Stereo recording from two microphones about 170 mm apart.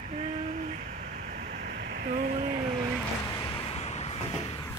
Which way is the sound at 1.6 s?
70° right (ahead or behind).